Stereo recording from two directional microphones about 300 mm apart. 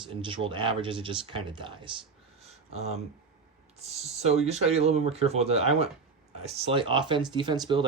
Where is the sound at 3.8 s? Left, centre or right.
Right.